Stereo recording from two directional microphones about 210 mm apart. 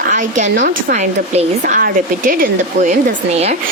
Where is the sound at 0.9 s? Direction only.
30° right (ahead or behind).